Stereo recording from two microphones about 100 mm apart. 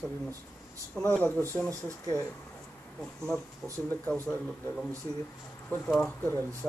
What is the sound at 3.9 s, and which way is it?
Speech, 15° left (ahead or behind).